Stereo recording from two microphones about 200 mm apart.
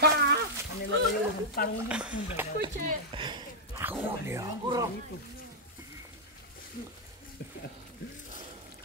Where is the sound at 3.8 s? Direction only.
10° right (ahead or behind).